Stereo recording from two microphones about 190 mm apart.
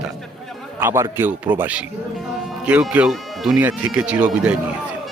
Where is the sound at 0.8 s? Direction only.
10° right (ahead or behind).